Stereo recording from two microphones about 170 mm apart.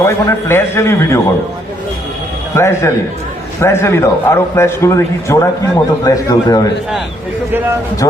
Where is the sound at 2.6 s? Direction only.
15° left (ahead or behind).